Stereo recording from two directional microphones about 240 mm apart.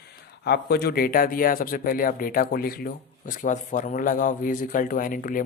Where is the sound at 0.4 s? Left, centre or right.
Left.